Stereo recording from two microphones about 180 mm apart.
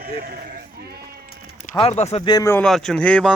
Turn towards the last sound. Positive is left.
turn(degrees=5)  # may be behind; listen again after turning